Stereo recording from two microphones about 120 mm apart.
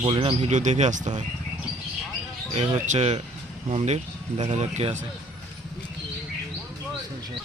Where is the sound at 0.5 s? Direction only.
80° right.